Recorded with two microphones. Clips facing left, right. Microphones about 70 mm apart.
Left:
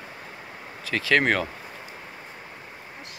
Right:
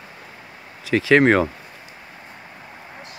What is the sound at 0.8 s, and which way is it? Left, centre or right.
Speech, centre.